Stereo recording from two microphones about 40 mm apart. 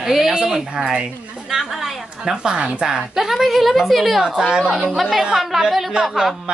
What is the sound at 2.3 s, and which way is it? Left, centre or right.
Speech, right.